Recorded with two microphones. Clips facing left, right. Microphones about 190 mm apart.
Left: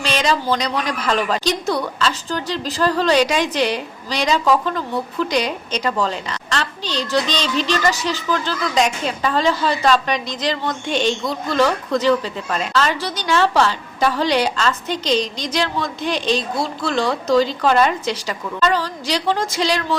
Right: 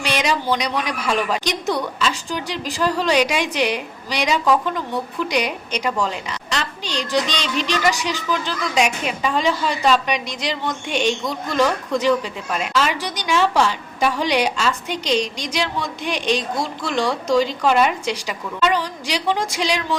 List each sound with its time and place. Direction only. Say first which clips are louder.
0.0 s a woman's voice: left 2 dB; 15° right (ahead or behind)
7.3 s music: left 3 dB; 35° left (ahead or behind)
7.7 s a woman's voice: right 1 dB; 15° right (ahead or behind)